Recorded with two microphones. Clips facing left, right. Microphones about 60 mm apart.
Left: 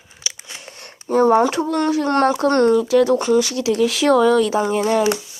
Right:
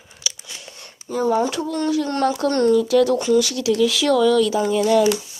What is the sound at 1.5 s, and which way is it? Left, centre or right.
Speech, left.